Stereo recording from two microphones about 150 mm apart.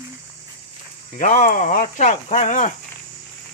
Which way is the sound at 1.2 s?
60° left (ahead or behind).